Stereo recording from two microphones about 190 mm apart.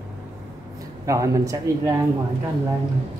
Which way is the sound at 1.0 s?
15° right (ahead or behind).